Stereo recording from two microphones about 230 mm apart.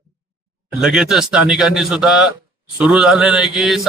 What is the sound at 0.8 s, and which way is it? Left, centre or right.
A man's voice, centre.